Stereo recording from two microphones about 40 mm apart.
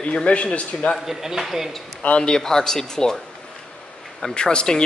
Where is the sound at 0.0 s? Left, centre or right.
Left.